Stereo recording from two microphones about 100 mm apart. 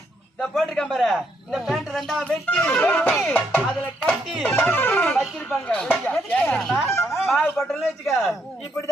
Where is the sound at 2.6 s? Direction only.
20° left (ahead or behind).